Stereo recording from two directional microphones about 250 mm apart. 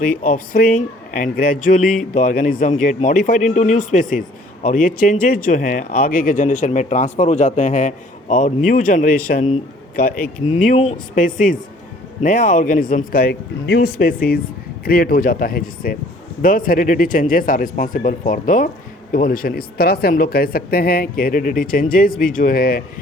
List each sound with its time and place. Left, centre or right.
0.2 s speech: left